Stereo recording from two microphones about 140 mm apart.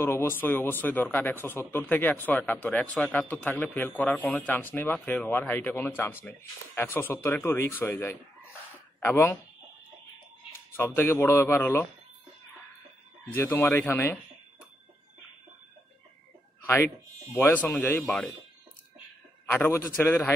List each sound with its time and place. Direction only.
0.0 s speech: 15° left (ahead or behind)
10.8 s speech: 15° left (ahead or behind)
13.3 s speech: 15° left (ahead or behind)
16.6 s speech: 15° left (ahead or behind)
19.4 s speech: 15° left (ahead or behind)